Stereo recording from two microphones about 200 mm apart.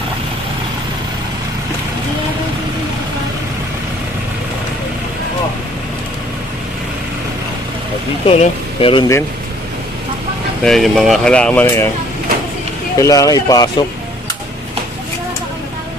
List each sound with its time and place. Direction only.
8.3 s speech: 30° left (ahead or behind)
10.6 s speech: centre (ahead or behind)
13.0 s speech: 15° left (ahead or behind)